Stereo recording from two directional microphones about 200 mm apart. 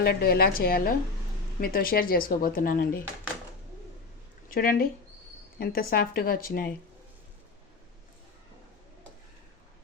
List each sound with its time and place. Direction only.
0.0 s speech: 50° left (ahead or behind)
4.4 s speech: 45° left (ahead or behind)